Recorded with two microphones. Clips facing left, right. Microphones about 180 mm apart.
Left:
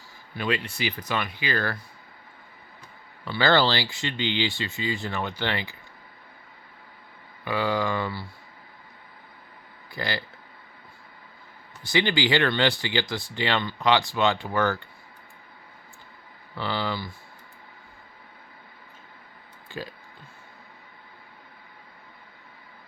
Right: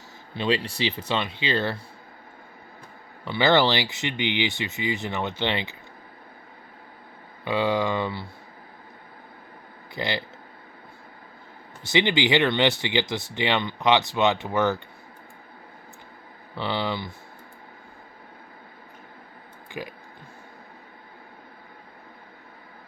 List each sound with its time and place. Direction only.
0.3 s speech: 30° right (ahead or behind)
3.2 s speech: 20° right (ahead or behind)
7.4 s speech: 20° right (ahead or behind)
9.9 s speech: 20° right (ahead or behind)
11.8 s speech: 20° right (ahead or behind)
16.6 s speech: 20° right (ahead or behind)
19.7 s speech: 15° right (ahead or behind)